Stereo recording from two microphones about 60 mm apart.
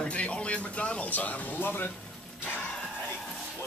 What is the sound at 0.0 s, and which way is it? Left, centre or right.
Music, left.